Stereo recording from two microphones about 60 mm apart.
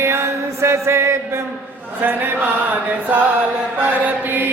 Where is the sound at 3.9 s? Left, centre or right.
Right.